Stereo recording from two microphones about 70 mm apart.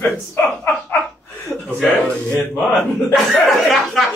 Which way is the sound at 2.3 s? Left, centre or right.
Left.